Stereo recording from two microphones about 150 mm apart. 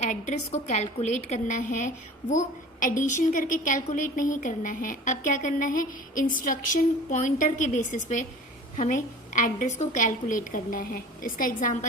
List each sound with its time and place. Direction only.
0.1 s a woman's voice: 50° left (ahead or behind)